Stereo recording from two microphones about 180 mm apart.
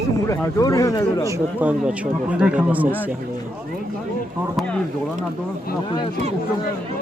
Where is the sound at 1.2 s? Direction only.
15° right (ahead or behind).